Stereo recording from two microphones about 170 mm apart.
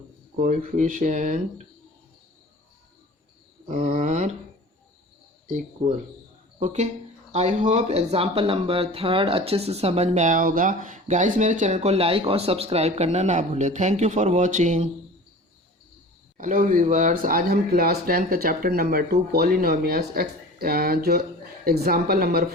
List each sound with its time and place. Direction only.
0.3 s speech: 50° right (ahead or behind)
3.7 s speech: 45° right (ahead or behind)
7.3 s speech: 45° right (ahead or behind)
16.4 s speech: 50° right (ahead or behind)